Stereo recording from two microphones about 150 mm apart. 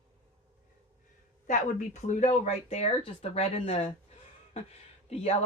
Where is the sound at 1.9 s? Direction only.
50° left (ahead or behind).